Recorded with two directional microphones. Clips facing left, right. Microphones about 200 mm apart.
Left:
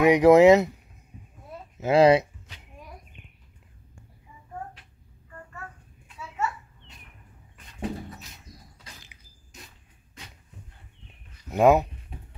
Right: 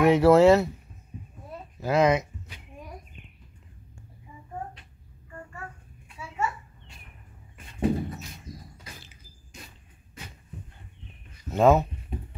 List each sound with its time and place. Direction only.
0.0 s speech: 15° left (ahead or behind)
1.8 s speech: 30° left (ahead or behind)
7.5 s a sound: 5° right (ahead or behind)
11.4 s speech: 15° left (ahead or behind)